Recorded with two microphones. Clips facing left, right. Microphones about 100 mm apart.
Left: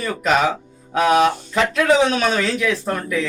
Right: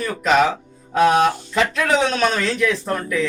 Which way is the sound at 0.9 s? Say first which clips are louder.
Even; centre (ahead or behind).